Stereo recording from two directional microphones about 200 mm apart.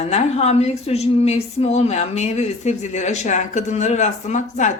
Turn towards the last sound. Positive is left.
turn(degrees=35)  # may be behind; listen again after turning